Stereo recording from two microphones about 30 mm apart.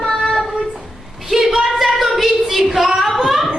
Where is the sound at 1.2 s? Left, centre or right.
Centre.